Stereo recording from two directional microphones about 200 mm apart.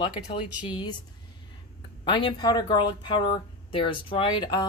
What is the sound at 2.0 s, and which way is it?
Speech, 25° left (ahead or behind).